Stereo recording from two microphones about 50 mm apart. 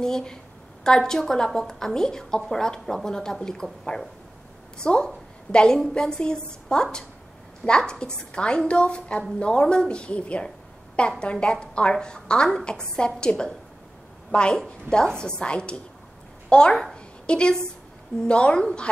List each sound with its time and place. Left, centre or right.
0.0 s a woman's voice: centre
4.7 s a woman's voice: centre
16.9 s a sound: centre
18.2 s a woman's voice: left